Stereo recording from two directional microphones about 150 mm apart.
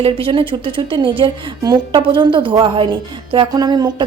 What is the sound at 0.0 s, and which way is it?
A woman's voice, 35° right (ahead or behind).